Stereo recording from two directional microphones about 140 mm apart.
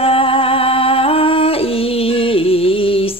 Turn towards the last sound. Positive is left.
turn(degrees=40)  # may be behind; listen again after turning